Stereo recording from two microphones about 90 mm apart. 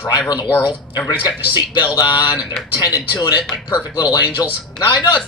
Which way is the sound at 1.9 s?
40° left (ahead or behind).